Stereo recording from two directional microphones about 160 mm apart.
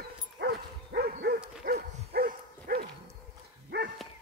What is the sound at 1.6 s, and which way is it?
Dog, 75° right (ahead or behind).